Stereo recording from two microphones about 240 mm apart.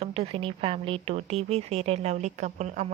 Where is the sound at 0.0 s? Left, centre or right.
Right.